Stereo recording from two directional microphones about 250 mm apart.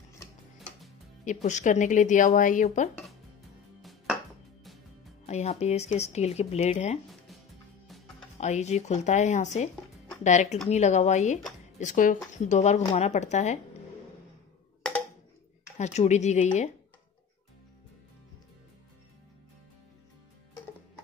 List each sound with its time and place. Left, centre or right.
1.2 s speech: left
5.2 s speech: left
8.4 s speech: left
15.8 s speech: left